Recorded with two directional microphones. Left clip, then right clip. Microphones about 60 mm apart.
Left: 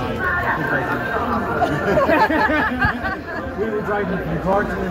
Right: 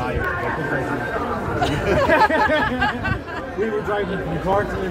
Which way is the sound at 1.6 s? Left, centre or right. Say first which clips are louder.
Left 1 dB; left.